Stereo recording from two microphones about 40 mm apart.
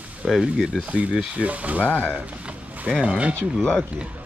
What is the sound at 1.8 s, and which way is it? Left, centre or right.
Speech, left.